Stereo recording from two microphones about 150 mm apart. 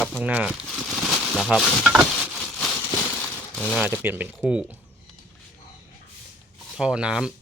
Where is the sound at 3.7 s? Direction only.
10° right (ahead or behind).